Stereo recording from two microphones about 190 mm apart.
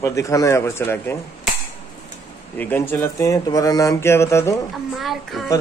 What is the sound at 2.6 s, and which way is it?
Speech, 10° left (ahead or behind).